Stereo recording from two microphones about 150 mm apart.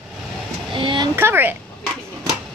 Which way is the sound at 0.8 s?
35° right (ahead or behind).